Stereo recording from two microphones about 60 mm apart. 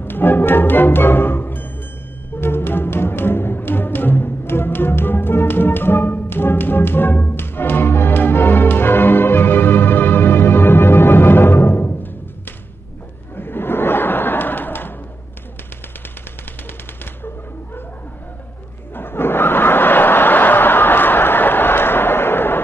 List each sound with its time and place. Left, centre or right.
0.0 s music: left
13.4 s a sound: left
16.6 s typewriter: left
18.9 s snicker: left